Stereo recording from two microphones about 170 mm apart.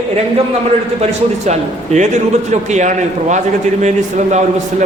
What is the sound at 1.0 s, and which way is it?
A man's voice, 40° right (ahead or behind).